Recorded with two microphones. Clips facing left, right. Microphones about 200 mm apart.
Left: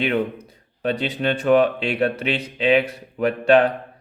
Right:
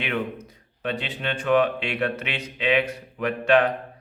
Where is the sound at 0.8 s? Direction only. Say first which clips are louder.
Left 6 dB; 40° left (ahead or behind).